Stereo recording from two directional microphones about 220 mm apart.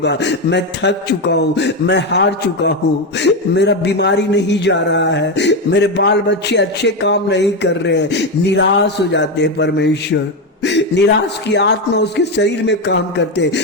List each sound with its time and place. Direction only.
0.0 s a man's voice: 50° left (ahead or behind)
10.6 s a sound: 50° left (ahead or behind)
11.5 s a man's voice: 50° left (ahead or behind)